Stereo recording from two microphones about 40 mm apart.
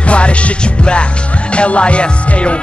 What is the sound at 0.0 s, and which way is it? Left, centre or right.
Music, left.